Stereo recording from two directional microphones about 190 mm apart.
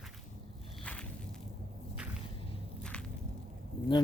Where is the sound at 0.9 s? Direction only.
5° left (ahead or behind).